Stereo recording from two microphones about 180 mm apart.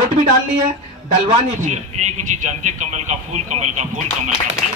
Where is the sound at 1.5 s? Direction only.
45° right (ahead or behind).